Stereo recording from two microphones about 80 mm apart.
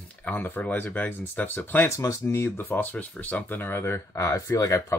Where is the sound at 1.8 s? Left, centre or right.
Left.